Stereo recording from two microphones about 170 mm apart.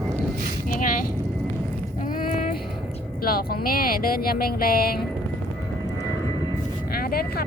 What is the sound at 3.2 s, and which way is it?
Speech, 60° left (ahead or behind).